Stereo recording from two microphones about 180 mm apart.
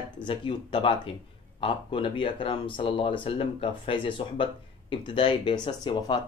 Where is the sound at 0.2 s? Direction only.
25° left (ahead or behind).